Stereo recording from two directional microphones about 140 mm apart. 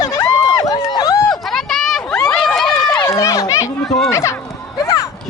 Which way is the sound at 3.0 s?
25° left (ahead or behind).